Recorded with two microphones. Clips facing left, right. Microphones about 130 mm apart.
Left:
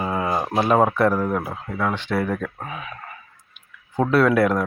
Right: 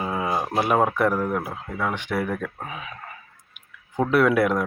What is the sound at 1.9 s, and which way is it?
Speech, 15° right (ahead or behind).